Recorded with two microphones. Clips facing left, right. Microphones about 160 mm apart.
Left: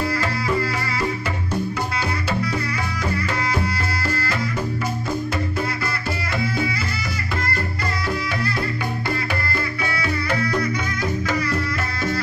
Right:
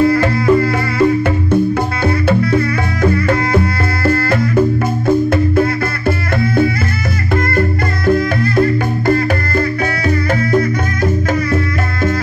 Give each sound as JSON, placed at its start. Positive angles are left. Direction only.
{"t": 0.0, "sound": "music", "side_deg": -55}
{"t": 2.0, "sound": "music", "side_deg": -55}
{"t": 8.1, "sound": "music", "side_deg": -45}